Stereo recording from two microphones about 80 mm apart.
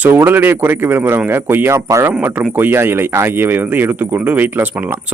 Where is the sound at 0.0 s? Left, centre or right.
Right.